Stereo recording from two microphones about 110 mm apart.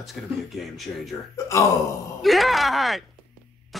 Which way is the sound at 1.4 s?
30° left (ahead or behind).